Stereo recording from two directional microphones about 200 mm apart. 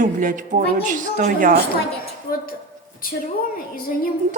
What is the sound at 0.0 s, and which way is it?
A woman's voice, 40° right (ahead or behind).